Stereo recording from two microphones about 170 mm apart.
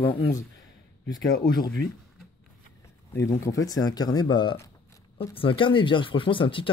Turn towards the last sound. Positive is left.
turn(degrees=30)  # may be behind; listen again after turning